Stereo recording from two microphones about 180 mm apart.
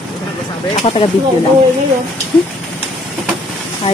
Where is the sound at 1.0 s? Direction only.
30° left (ahead or behind).